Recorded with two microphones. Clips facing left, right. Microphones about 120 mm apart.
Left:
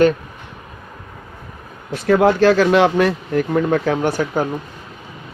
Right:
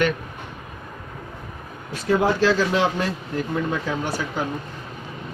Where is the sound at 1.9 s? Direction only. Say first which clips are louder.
Left 6 dB; 65° left (ahead or behind).